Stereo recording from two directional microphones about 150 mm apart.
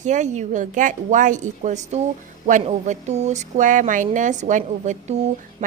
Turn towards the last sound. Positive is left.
turn(degrees=-50)  # may be behind; listen again after turning